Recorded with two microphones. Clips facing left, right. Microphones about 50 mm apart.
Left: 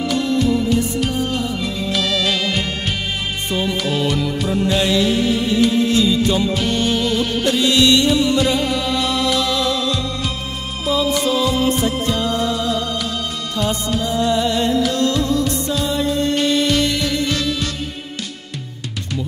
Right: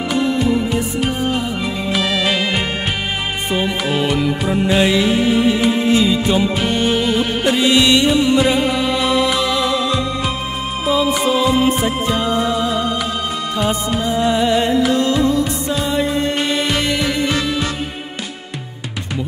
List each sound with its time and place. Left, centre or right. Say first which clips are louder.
0.1 s music: right 2 dB; centre